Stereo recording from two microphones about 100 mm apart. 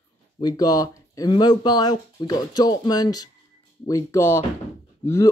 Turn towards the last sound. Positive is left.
turn(degrees=30)  # may be behind; listen again after turning